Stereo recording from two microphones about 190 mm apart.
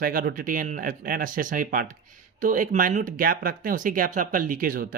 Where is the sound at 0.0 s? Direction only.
50° right (ahead or behind).